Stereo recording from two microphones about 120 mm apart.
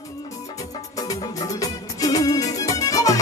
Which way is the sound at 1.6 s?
30° left (ahead or behind).